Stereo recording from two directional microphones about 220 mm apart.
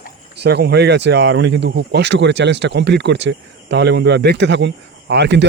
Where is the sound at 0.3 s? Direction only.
50° right (ahead or behind).